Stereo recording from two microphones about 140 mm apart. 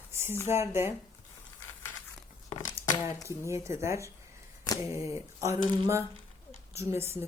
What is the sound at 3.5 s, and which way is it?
Speech, 20° right (ahead or behind).